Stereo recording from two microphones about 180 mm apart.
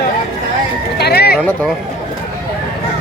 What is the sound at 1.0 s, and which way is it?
Horse, 65° left (ahead or behind).